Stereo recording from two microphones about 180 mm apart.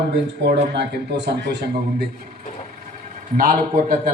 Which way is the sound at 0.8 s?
70° right (ahead or behind).